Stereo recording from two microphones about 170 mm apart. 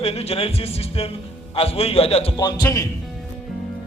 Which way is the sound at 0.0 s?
35° left (ahead or behind).